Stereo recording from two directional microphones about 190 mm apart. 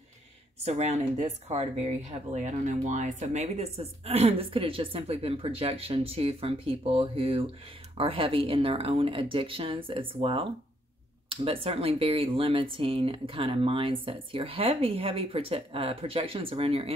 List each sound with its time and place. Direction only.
0.7 s speech: 35° right (ahead or behind)